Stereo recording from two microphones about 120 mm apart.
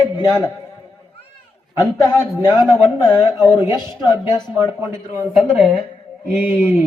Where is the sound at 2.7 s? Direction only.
20° right (ahead or behind).